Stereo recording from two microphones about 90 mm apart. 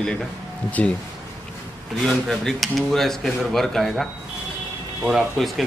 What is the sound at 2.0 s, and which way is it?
Speech, 5° left (ahead or behind).